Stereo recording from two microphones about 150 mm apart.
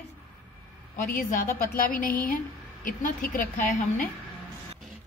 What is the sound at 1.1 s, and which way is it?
A woman's voice, 70° left (ahead or behind).